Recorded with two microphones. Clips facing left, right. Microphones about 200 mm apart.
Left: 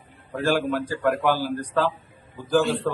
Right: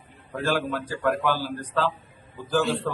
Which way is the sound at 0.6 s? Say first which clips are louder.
Left 3 dB; 10° left (ahead or behind).